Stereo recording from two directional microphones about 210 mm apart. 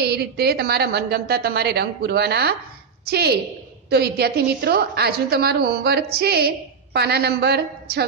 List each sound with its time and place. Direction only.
0.0 s a woman's voice: 50° right (ahead or behind)